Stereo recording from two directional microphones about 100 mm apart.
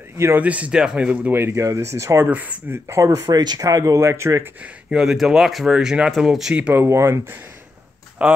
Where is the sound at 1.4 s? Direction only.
30° right (ahead or behind).